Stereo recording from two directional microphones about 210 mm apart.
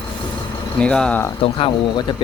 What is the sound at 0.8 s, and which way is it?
Speech, 5° left (ahead or behind).